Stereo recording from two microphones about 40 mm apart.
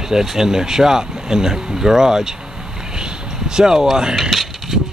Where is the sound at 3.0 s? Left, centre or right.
Centre.